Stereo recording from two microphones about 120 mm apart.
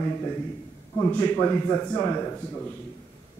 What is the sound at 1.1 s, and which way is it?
Speech, 10° left (ahead or behind).